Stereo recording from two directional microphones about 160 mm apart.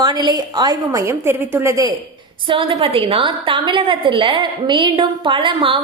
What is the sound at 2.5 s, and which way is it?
A woman's voice, 35° right (ahead or behind).